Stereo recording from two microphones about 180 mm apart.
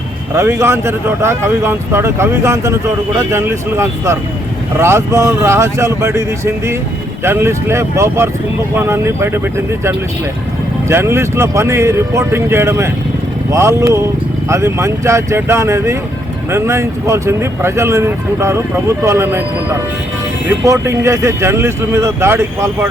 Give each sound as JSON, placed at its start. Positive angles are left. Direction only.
{"t": 0.3, "sound": "speech", "side_deg": -15}
{"t": 10.8, "sound": "speech", "side_deg": -15}